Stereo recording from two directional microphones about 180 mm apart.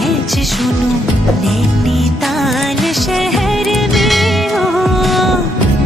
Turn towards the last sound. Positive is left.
turn(degrees=0)  # may be behind; listen again after turning